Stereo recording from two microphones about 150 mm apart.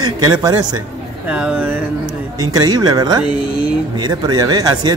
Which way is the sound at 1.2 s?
10° right (ahead or behind).